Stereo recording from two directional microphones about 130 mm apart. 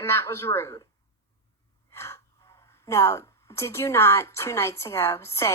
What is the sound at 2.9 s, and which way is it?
Speech, 20° left (ahead or behind).